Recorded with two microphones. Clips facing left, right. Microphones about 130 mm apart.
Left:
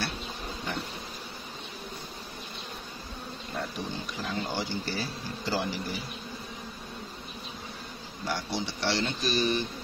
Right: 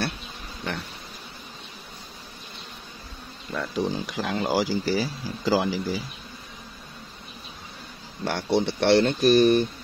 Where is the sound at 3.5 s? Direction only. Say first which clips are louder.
Right 8 dB; 90° right.